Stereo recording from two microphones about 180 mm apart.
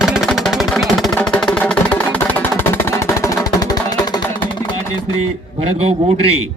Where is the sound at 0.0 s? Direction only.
Centre (ahead or behind); by 5.1 s 25° left (ahead or behind).